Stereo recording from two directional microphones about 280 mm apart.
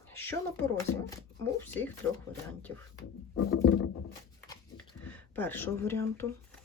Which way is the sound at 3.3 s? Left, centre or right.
Left.